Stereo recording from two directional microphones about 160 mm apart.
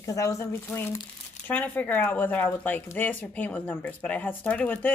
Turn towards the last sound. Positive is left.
turn(degrees=10)  # may be behind; listen again after turning